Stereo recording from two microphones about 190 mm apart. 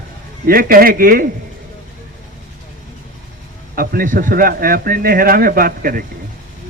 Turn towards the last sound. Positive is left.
turn(degrees=-50)  # may be behind; listen again after turning